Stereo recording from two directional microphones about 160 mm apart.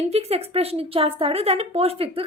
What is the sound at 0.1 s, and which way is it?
A woman's voice, 40° right (ahead or behind).